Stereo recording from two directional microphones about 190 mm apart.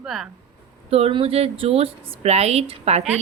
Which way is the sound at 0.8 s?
30° right (ahead or behind).